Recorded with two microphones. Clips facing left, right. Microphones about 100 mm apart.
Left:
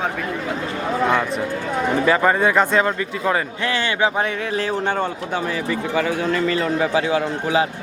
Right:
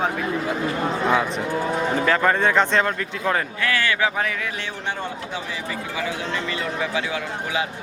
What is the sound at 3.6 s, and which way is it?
Speech, 25° left (ahead or behind).